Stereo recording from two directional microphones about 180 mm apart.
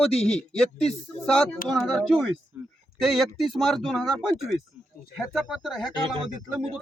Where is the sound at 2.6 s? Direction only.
10° right (ahead or behind).